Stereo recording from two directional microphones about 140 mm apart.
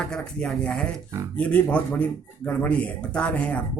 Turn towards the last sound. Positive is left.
turn(degrees=10)  # may be behind; listen again after turning